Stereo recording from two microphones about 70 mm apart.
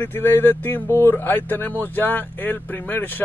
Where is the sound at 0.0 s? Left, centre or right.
Left.